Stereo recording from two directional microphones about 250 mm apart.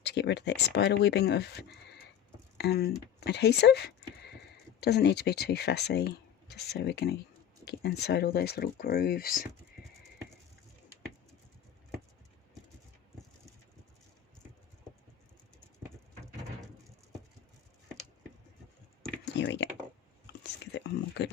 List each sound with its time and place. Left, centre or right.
0.0 s speech: left
19.2 s computer keyboard: left
20.7 s a sound: left